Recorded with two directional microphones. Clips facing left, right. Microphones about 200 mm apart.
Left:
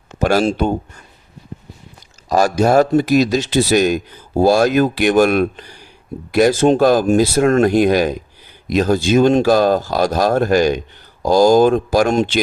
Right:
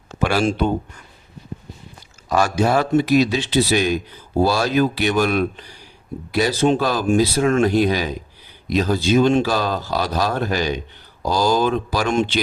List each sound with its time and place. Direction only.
0.2 s speech: 40° left (ahead or behind)
2.3 s speech: 40° left (ahead or behind)